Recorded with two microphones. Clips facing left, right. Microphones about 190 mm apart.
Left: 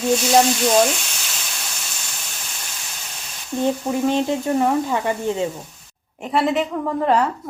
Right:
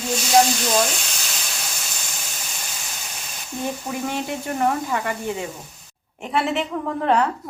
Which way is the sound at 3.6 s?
25° left (ahead or behind).